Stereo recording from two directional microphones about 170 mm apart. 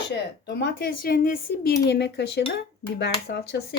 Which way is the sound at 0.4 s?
70° left (ahead or behind).